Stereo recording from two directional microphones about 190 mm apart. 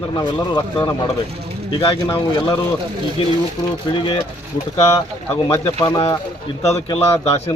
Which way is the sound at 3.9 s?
20° left (ahead or behind).